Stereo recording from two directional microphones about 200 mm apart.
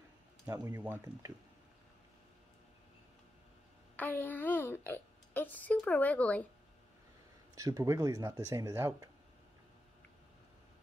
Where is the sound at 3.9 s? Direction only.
10° left (ahead or behind).